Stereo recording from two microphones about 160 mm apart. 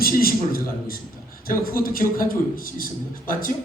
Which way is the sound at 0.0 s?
65° left (ahead or behind).